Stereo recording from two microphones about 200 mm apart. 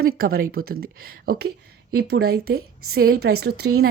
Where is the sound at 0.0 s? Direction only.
45° right (ahead or behind).